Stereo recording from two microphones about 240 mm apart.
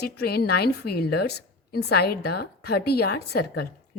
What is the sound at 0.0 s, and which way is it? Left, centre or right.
A woman's voice, left.